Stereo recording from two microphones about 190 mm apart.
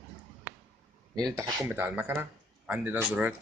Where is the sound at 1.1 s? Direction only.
20° right (ahead or behind).